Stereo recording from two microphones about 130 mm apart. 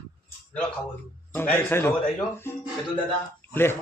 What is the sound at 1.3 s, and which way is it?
A man's voice, 15° left (ahead or behind).